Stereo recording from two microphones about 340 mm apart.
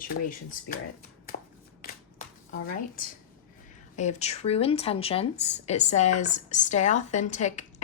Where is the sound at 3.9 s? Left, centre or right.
Centre.